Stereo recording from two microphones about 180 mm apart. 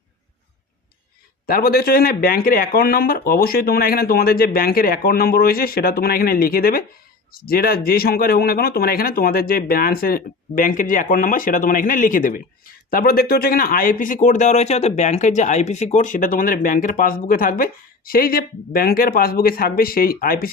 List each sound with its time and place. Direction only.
1.5 s speech: 55° left (ahead or behind)